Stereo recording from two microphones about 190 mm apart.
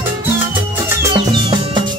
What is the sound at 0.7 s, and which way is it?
Music, 20° right (ahead or behind).